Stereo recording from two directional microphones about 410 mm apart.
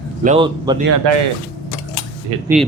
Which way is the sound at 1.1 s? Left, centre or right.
Right.